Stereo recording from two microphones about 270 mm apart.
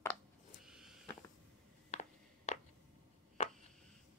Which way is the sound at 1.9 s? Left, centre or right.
Left.